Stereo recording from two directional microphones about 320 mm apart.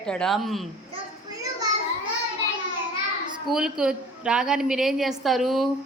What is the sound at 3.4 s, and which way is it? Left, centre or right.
A woman's voice, centre.